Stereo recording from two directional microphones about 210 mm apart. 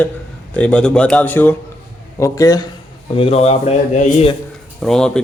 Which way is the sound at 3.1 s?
25° left (ahead or behind).